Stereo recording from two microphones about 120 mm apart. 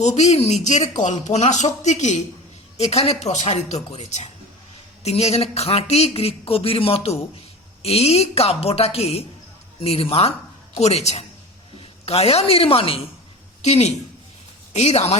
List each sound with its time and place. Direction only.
0.0 s speech: 70° left (ahead or behind)
2.7 s speech: 60° left (ahead or behind)
13.6 s speech: 65° left (ahead or behind)